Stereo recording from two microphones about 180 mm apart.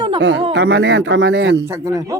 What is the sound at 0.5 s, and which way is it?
Speech, 70° right (ahead or behind).